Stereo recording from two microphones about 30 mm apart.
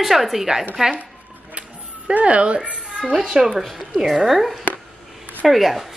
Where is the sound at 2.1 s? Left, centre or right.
Right.